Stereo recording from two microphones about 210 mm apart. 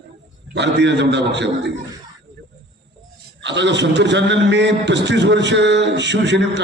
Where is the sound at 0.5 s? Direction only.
55° right (ahead or behind).